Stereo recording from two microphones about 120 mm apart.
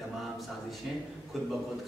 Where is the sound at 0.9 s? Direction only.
5° right (ahead or behind).